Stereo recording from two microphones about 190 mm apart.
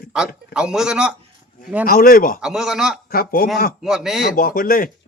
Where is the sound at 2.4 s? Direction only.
Centre (ahead or behind).